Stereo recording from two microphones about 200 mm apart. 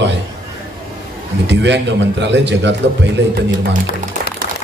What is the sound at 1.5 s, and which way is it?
A man's voice, 60° right (ahead or behind).